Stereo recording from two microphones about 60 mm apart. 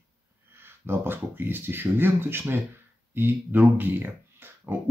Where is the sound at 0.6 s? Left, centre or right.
Right.